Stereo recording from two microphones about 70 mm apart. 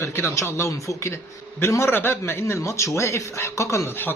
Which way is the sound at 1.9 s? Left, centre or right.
Left.